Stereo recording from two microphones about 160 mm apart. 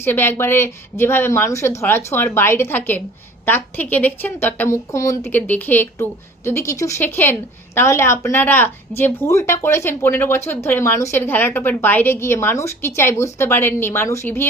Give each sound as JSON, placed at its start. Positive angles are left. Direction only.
{"t": 0.0, "sound": "speech", "side_deg": 15}